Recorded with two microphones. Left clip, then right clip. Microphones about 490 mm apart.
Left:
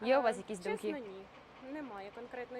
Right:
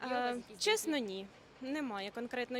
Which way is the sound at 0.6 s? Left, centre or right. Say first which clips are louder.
Right 5 dB; right.